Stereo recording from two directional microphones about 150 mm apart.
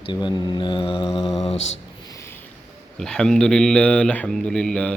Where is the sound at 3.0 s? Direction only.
5° left (ahead or behind).